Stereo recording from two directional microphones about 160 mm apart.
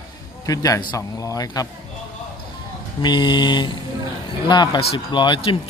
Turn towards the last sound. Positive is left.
turn(degrees=30)  # may be behind; listen again after turning